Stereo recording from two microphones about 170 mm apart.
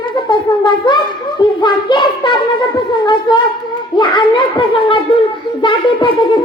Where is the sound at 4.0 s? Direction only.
30° left (ahead or behind).